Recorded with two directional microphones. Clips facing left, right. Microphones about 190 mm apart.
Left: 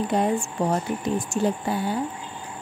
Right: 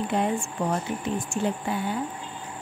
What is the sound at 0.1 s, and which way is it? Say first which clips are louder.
Speech: left 2 dB; 40° left (ahead or behind).